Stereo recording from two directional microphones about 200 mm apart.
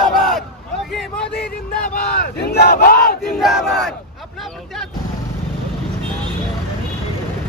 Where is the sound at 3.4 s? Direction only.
Centre (ahead or behind).